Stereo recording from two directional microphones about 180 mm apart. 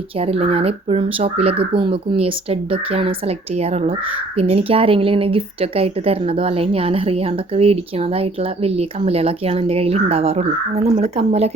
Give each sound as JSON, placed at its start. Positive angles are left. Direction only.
{"t": 0.2, "sound": "speech", "side_deg": -35}